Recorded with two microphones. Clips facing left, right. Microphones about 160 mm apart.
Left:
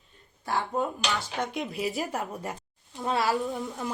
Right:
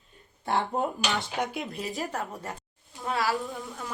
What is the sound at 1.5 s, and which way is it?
Speech, 5° left (ahead or behind).